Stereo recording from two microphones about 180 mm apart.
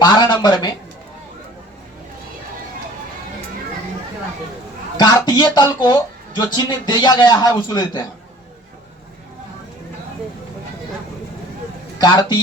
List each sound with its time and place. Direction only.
0.0 s a sound: 25° left (ahead or behind)
4.9 s speech: 25° left (ahead or behind)
11.9 s a man's voice: 25° left (ahead or behind)